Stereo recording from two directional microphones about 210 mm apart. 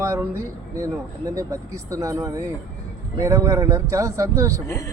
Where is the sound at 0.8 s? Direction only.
15° right (ahead or behind).